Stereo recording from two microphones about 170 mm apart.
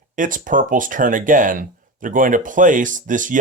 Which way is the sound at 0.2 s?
50° right (ahead or behind).